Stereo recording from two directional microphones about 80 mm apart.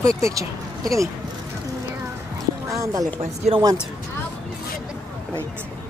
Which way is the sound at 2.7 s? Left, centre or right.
Right.